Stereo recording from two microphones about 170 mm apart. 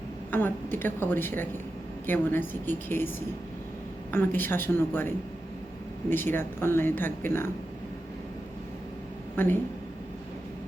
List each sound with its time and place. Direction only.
0.3 s speech: 10° left (ahead or behind)
4.1 s speech: 10° left (ahead or behind)
9.3 s speech: 10° left (ahead or behind)